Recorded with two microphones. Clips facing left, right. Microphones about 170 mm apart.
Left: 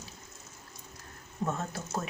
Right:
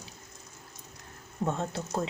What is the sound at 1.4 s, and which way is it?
Speech, 20° right (ahead or behind).